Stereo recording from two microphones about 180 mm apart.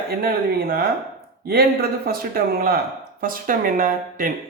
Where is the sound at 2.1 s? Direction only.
55° right (ahead or behind).